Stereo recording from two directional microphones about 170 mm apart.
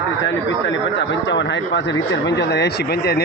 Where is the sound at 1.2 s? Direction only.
90° left.